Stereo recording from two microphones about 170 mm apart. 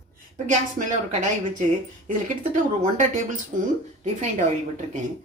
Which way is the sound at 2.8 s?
45° right (ahead or behind).